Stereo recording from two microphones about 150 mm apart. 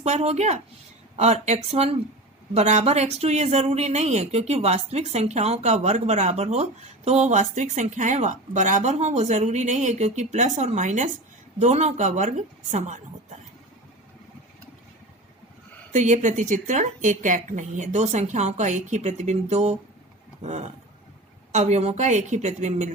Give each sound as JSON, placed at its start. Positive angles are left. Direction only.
{"t": 0.0, "sound": "speech", "side_deg": -50}
{"t": 15.9, "sound": "speech", "side_deg": -55}